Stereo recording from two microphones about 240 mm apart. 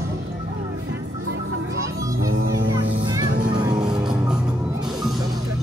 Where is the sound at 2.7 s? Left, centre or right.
Centre.